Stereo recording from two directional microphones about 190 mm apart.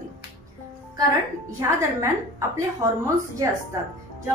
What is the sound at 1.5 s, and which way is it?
A woman's voice, 15° right (ahead or behind).